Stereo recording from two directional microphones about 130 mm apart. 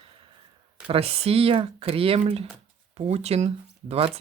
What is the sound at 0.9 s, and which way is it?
Speech, 50° right (ahead or behind).